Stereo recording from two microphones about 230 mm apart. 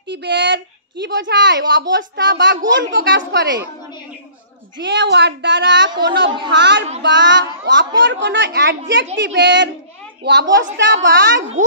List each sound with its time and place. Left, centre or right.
0.1 s a woman's voice: right
4.7 s a woman's voice: right